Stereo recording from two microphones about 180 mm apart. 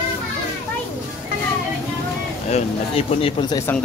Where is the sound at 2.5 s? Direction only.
35° left (ahead or behind).